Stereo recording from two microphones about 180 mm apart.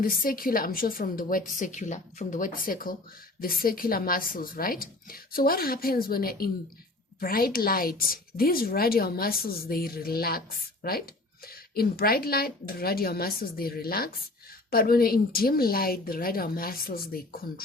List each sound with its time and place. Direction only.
0.0 s speech: 50° left (ahead or behind)